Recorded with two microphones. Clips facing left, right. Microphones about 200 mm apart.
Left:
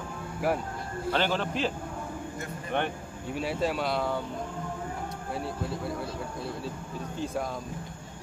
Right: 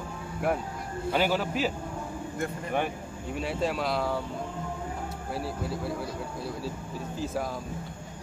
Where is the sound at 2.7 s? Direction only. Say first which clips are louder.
Left 1 dB; centre (ahead or behind).